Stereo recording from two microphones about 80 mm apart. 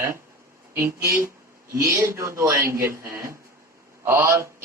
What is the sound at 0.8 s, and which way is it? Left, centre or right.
A man's voice, right.